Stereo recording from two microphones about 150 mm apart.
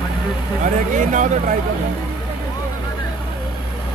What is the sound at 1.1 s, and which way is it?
Speech, 60° right (ahead or behind).